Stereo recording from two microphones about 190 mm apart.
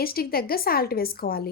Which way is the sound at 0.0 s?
50° left (ahead or behind).